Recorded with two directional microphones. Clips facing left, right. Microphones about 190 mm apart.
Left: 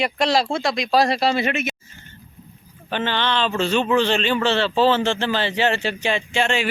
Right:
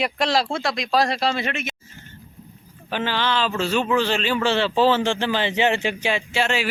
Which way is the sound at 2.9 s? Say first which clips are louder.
Left 1 dB; 5° right (ahead or behind).